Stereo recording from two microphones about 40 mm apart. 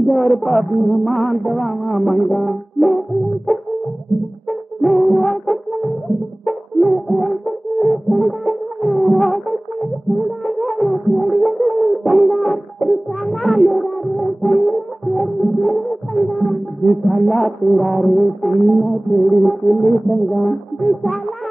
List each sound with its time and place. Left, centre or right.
0.0 s music: centre
4.5 s brass instrument: centre
6.4 s music: centre